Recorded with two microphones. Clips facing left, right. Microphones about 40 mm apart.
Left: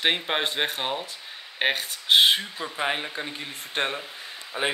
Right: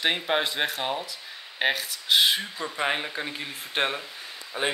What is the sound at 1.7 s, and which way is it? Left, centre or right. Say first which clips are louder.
Speech: left 3 dB; left.